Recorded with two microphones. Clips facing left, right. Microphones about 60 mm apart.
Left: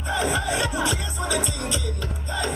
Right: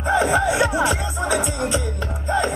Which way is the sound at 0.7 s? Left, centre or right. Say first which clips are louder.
Right 5 dB; right.